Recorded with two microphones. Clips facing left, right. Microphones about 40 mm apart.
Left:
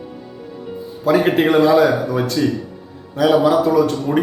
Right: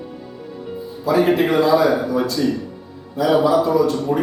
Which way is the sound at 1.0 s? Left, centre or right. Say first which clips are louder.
Left 1 dB; left.